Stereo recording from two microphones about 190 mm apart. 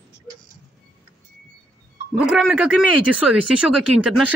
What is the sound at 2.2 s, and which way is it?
Speech, 5° right (ahead or behind).